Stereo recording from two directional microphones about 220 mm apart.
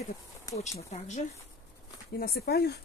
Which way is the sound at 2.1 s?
45° left (ahead or behind).